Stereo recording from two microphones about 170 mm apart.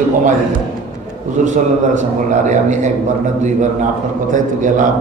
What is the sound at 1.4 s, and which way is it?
A man's voice, 45° right (ahead or behind).